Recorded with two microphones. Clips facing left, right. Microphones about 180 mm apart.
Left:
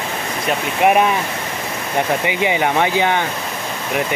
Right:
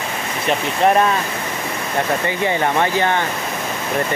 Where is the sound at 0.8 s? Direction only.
15° left (ahead or behind).